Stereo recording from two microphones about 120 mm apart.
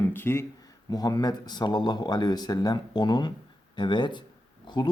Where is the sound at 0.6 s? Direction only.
30° left (ahead or behind).